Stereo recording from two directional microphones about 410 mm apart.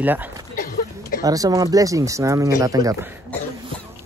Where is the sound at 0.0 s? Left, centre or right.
Centre.